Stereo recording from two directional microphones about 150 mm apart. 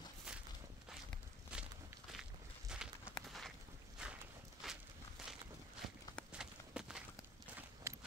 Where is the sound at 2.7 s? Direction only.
5° right (ahead or behind).